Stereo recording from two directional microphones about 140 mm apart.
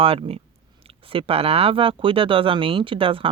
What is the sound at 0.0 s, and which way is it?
Speech, 40° right (ahead or behind).